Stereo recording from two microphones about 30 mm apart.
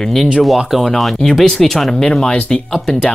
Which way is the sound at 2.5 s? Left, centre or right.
Left.